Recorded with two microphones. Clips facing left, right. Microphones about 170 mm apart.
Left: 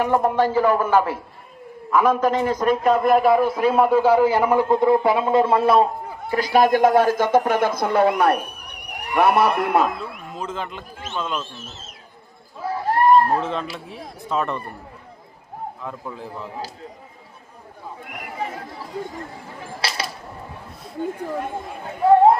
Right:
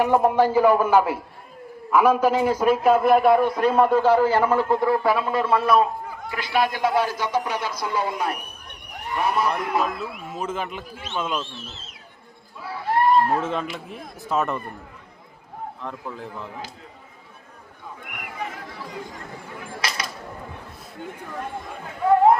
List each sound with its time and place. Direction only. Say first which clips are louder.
0.0 s a man's voice: right 1 dB; 10° right (ahead or behind); by 9.8 s 65° left (ahead or behind)
10.0 s a man's voice: right 1 dB; 5° right (ahead or behind)
12.6 s a sound: left 3 dB; 40° left (ahead or behind)
13.4 s speech: even; 5° right (ahead or behind)
15.8 s speech: left 1 dB; centre (ahead or behind)
18.1 s chatter: left 4 dB; 30° left (ahead or behind)
19.8 s a sound: left 2 dB; 30° left (ahead or behind)
22.0 s chatter: left 4 dB; 30° left (ahead or behind)